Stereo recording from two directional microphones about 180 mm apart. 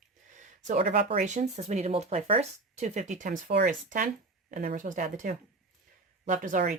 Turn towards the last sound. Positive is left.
turn(degrees=-50)  # may be behind; listen again after turning